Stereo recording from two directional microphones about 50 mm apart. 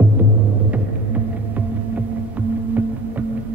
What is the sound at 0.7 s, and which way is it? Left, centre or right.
Throbbing, right.